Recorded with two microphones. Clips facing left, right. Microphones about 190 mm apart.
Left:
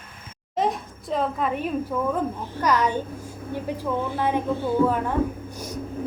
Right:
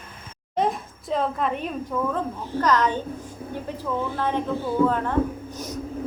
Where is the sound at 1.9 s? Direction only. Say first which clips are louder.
Right 2 dB; 10° left (ahead or behind).